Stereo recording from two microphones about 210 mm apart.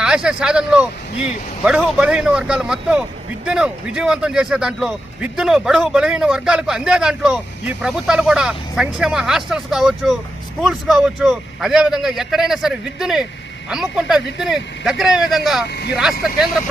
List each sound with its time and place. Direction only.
0.0 s a man's voice: 5° right (ahead or behind)
15.6 s speech: 50° left (ahead or behind)